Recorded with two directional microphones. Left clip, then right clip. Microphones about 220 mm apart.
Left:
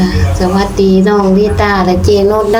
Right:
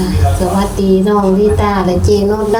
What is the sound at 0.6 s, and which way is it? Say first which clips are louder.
Speech: left 5 dB; 45° left (ahead or behind).